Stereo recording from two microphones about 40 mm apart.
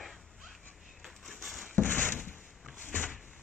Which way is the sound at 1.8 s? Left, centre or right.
Left.